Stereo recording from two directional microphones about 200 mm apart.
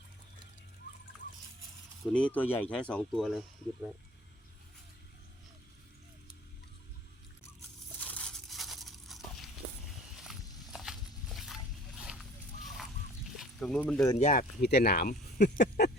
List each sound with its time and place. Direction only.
2.1 s speech: 5° left (ahead or behind)
8.0 s tearing: 5° left (ahead or behind)
10.2 s walk: centre (ahead or behind)
12.6 s a sound: centre (ahead or behind)
14.2 s speech: 40° left (ahead or behind)
14.6 s speech: 55° left (ahead or behind)